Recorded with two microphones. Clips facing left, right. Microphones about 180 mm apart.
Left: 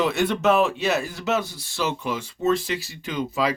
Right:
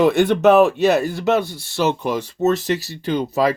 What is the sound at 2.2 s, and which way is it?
Speech, 40° right (ahead or behind).